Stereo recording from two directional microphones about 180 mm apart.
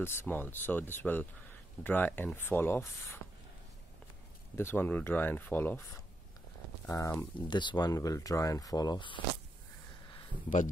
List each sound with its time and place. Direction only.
0.0 s speech: 15° left (ahead or behind)
4.6 s speech: 10° left (ahead or behind)